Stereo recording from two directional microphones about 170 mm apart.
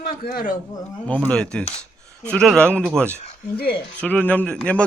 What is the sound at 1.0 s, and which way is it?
Speech, 10° left (ahead or behind).